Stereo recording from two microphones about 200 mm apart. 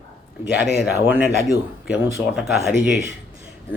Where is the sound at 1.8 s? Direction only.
5° right (ahead or behind).